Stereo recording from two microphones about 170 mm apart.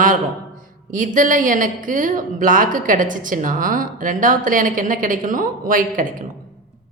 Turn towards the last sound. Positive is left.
turn(degrees=-55)  # may be behind; listen again after turning